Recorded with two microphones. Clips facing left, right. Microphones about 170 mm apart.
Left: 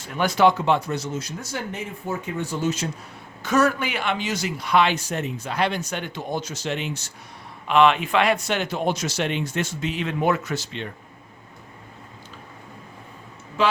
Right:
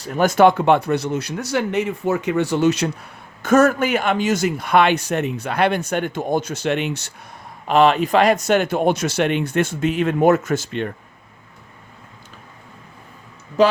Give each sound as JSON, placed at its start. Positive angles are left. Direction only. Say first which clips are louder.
{"t": 0.0, "sound": "speech", "louder": "right 5 dB", "side_deg": -45}
{"t": 3.4, "sound": "speech", "louder": "right 6 dB", "side_deg": -50}
{"t": 7.7, "sound": "speech", "louder": "right 3 dB", "side_deg": -40}
{"t": 13.6, "sound": "speech", "louder": "right 6 dB", "side_deg": -40}